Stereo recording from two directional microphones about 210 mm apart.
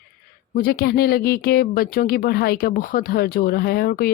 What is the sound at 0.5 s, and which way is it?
Speech, 45° left (ahead or behind).